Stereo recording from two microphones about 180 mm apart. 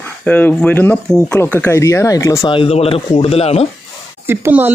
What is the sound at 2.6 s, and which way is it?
Speech, 35° left (ahead or behind).